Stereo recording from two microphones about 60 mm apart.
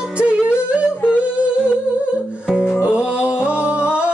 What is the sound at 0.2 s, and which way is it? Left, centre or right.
Music, right.